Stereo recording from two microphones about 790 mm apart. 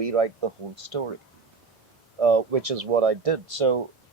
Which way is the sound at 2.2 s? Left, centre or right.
Right.